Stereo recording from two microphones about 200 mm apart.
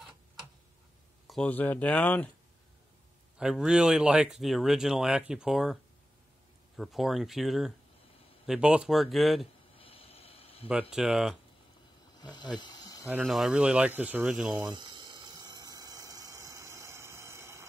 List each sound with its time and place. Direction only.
1.2 s speech: 5° left (ahead or behind)
3.3 s speech: 5° right (ahead or behind)
6.8 s speech: centre (ahead or behind)
9.8 s a sound: 30° left (ahead or behind)
10.7 s speech: 5° right (ahead or behind)
12.2 s snake: 20° left (ahead or behind)
13.0 s speech: 5° right (ahead or behind)
14.7 s a sound: 20° right (ahead or behind)